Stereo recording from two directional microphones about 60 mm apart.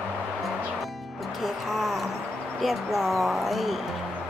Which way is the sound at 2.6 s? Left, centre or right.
Centre.